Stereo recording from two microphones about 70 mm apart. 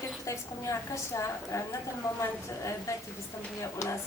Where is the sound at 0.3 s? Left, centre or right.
Left.